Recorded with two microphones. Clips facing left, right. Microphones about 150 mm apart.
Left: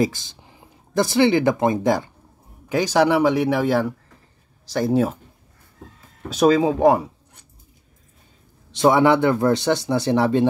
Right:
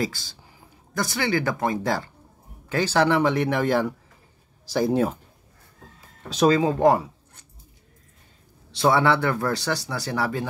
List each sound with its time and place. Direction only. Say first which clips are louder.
0.0 s speech: left 7 dB; 20° left (ahead or behind); by 5.2 s centre (ahead or behind)
6.3 s speech: left 3 dB; 5° left (ahead or behind)
8.7 s speech: left 4 dB; 20° left (ahead or behind)